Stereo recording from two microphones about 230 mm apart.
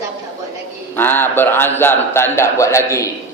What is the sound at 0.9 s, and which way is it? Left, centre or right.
A man's voice, centre.